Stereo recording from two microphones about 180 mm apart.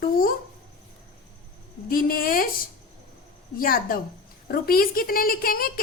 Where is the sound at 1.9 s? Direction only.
55° left (ahead or behind).